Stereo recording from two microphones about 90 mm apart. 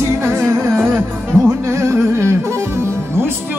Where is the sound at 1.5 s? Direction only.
30° right (ahead or behind).